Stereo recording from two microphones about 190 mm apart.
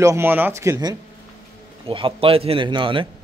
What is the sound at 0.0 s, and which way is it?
A man's voice, 15° right (ahead or behind).